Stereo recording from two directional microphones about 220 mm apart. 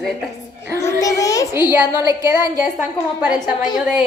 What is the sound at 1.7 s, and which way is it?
Speech, 10° right (ahead or behind).